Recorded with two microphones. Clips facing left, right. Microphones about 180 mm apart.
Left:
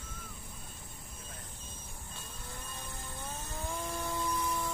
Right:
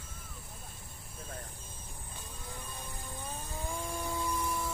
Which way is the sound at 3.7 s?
10° right (ahead or behind).